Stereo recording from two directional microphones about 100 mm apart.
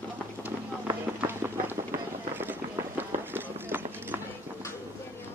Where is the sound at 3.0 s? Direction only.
20° right (ahead or behind).